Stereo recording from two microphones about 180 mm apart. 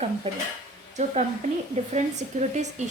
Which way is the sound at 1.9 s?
40° right (ahead or behind).